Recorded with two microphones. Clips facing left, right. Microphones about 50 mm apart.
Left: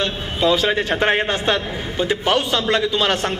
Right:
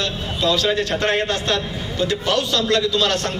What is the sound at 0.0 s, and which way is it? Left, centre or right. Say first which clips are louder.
A man's voice: left 2 dB; left.